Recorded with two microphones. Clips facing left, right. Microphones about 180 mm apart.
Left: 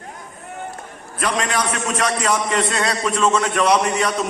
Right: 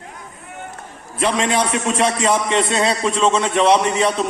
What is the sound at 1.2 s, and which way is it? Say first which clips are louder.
A man's voice: right 3 dB; 25° right (ahead or behind).